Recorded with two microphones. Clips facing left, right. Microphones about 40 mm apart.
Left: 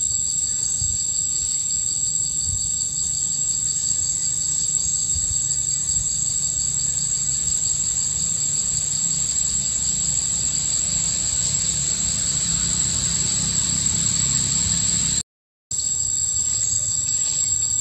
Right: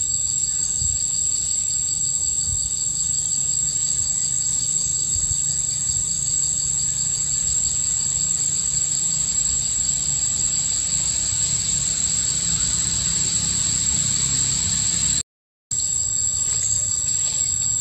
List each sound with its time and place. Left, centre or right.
8.2 s vehicle: centre